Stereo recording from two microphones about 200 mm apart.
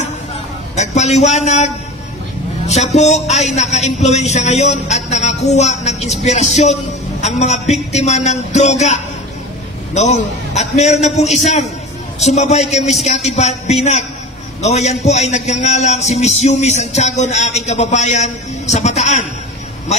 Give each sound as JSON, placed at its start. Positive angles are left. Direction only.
{"t": 0.7, "sound": "a woman's voice", "side_deg": 35}